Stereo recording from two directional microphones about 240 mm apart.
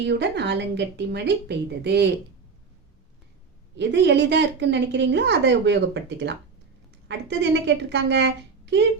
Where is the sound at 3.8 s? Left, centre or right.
Right.